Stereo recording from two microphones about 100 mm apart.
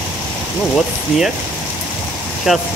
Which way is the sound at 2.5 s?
5° right (ahead or behind).